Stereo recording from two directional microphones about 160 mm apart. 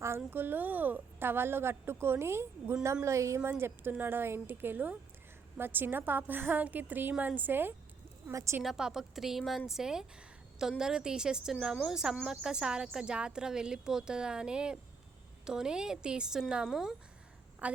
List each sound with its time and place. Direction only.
0.2 s a woman's voice: 10° right (ahead or behind)
8.6 s a woman's voice: centre (ahead or behind)